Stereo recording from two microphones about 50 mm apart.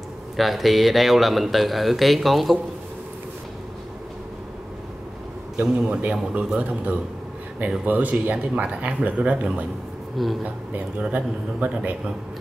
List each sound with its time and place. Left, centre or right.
0.4 s speech: centre
5.6 s speech: right
10.1 s speech: centre
10.4 s a man's voice: right